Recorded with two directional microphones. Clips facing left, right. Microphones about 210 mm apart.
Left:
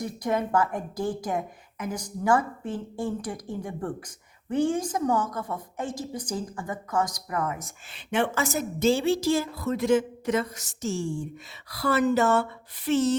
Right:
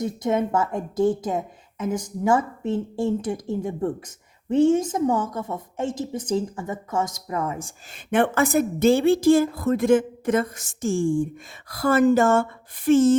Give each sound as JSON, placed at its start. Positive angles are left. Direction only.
{"t": 0.0, "sound": "a woman's voice", "side_deg": -25}
{"t": 7.9, "sound": "a woman's voice", "side_deg": -55}